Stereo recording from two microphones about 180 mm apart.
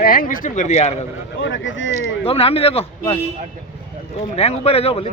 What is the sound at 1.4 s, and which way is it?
Speech, 90° left.